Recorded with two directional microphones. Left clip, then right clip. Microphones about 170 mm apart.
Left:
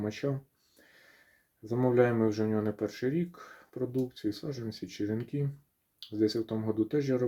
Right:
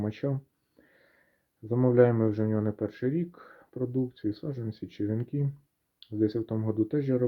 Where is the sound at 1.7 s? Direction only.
45° right (ahead or behind).